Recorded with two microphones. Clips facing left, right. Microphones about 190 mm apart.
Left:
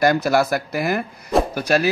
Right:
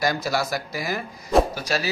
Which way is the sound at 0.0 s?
55° left (ahead or behind).